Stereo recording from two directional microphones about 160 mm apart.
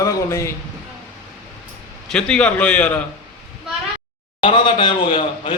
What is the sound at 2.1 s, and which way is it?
Speech, 5° left (ahead or behind).